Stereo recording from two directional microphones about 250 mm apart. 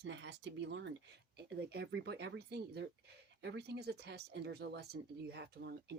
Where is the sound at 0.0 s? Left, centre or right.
Right.